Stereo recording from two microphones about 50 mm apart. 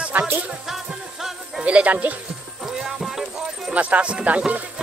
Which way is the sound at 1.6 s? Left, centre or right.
Right.